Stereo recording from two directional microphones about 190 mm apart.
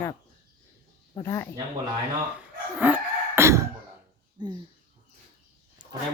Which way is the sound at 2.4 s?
10° right (ahead or behind).